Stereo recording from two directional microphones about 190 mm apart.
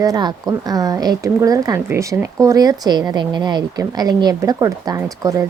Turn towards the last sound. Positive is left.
turn(degrees=-15)  # may be behind; listen again after turning